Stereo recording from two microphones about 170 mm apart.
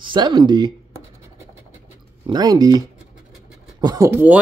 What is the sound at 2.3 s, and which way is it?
Speech, 25° right (ahead or behind).